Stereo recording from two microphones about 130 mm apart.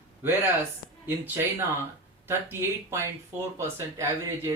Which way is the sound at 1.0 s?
15° right (ahead or behind).